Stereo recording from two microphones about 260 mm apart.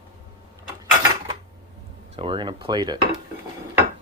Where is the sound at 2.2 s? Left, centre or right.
Centre.